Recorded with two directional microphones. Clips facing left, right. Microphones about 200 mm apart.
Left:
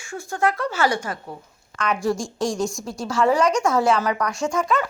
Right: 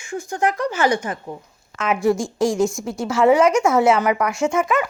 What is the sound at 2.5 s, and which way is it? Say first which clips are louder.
A woman's voice: right 5 dB; 25° right (ahead or behind).